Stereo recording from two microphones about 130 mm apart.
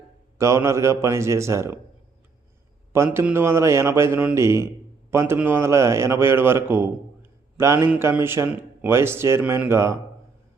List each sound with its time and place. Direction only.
0.3 s speech: 20° right (ahead or behind)
2.9 s a man's voice: 20° right (ahead or behind)